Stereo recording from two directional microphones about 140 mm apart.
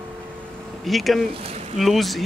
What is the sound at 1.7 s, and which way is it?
Speech, centre (ahead or behind).